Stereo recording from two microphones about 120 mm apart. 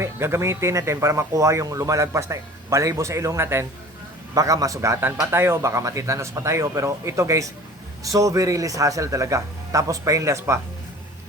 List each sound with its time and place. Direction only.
0.0 s speech: 20° right (ahead or behind)